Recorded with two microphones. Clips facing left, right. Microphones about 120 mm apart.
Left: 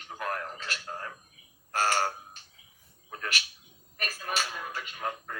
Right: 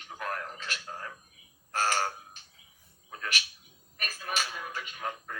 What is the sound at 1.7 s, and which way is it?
Crow, 45° left (ahead or behind).